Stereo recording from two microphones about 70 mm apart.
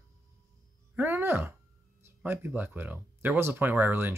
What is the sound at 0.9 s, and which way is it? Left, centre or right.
Speech, right.